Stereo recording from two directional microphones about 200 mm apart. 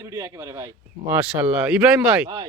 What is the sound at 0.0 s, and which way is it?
Speech, 15° right (ahead or behind).